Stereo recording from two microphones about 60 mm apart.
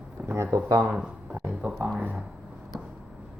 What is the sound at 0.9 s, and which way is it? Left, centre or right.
Speech, centre.